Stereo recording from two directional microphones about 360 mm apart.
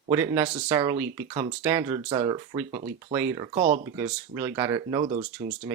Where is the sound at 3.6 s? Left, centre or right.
Right.